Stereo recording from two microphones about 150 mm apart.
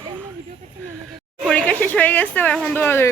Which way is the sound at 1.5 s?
10° left (ahead or behind).